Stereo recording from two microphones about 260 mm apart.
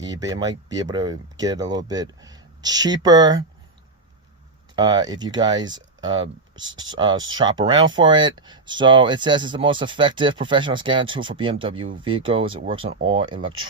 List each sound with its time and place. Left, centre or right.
0.3 s speech: centre
4.7 s speech: centre
7.3 s speech: centre